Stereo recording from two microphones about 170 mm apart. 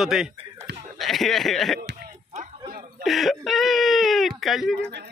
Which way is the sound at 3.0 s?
Centre (ahead or behind).